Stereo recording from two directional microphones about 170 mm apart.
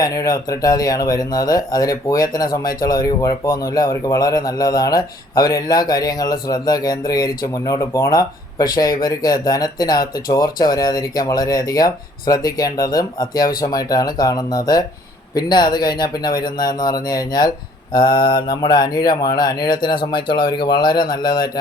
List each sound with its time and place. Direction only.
0.0 s speech: 20° left (ahead or behind)